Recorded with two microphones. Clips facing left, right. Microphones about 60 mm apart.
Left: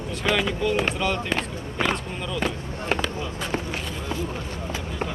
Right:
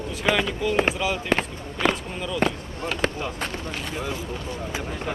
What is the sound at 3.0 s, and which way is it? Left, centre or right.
Speech, right.